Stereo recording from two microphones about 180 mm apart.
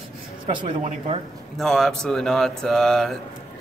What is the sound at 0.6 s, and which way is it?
Speech, 40° right (ahead or behind).